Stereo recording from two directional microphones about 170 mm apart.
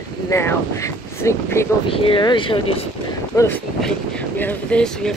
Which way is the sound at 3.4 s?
10° left (ahead or behind).